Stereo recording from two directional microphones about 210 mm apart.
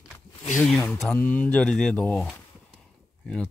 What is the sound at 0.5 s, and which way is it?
Speech, 5° left (ahead or behind).